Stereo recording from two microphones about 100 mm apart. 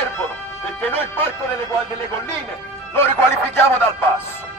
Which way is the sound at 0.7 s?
15° left (ahead or behind).